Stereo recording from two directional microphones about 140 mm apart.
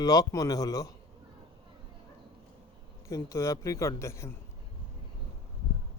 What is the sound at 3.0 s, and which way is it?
Speech, 20° left (ahead or behind).